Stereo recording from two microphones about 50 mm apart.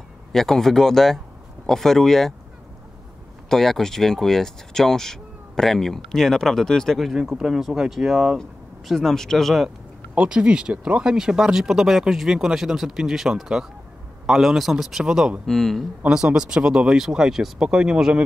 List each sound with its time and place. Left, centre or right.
0.3 s speech: centre
3.4 s speech: centre
7.0 s speech: centre
9.1 s speech: centre
10.1 s speech: centre
15.4 s speech: centre
16.1 s speech: centre